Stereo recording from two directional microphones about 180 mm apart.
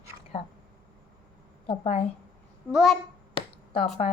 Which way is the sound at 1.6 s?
35° left (ahead or behind).